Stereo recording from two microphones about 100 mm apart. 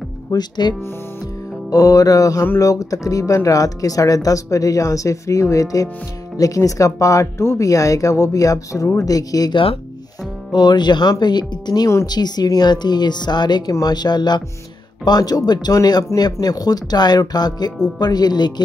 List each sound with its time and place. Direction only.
0.3 s speech: 45° left (ahead or behind)
1.7 s speech: 35° left (ahead or behind)